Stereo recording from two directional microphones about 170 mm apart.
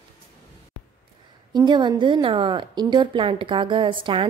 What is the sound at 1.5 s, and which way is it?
A woman's voice, 25° right (ahead or behind).